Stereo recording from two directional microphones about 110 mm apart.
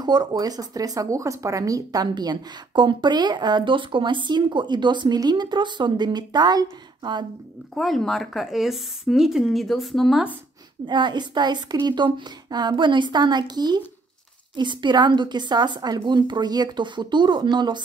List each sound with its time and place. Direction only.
0.0 s speech: 40° right (ahead or behind)
7.7 s speech: 5° left (ahead or behind)
10.9 s a woman's voice: 45° right (ahead or behind)